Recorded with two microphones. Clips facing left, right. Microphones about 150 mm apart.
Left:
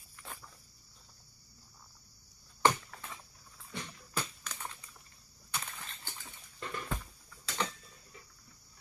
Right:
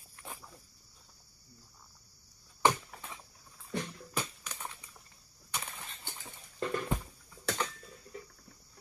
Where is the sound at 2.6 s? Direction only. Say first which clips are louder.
Even; 10° right (ahead or behind).